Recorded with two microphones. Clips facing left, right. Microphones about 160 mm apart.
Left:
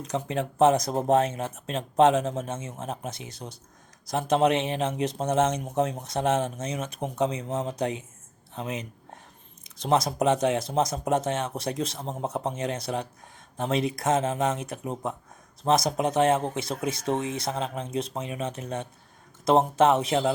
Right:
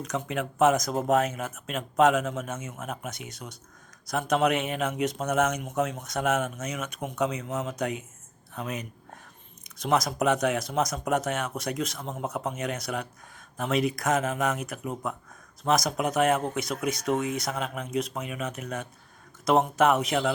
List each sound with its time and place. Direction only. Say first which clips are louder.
0.0 s speech: left 2 dB; 30° left (ahead or behind)